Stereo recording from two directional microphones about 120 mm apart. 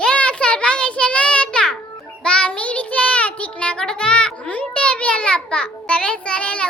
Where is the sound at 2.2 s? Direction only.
10° left (ahead or behind).